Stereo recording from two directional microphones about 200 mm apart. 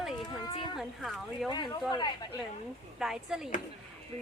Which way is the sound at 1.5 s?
20° left (ahead or behind).